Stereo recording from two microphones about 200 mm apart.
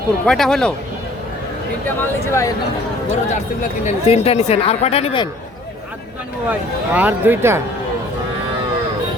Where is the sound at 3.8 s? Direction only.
30° left (ahead or behind).